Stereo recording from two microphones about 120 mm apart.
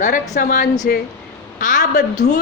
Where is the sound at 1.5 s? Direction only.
90° left.